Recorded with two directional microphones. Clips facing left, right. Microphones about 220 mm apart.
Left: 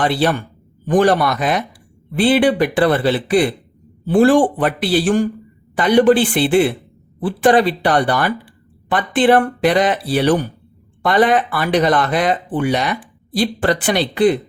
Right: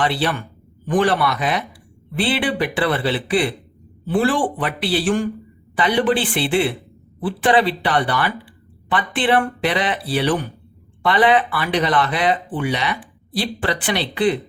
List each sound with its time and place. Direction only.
0.0 s speech: 45° left (ahead or behind)